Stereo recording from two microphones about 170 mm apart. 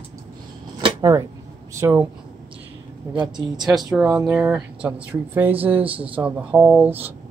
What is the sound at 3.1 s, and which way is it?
Speech, 25° right (ahead or behind).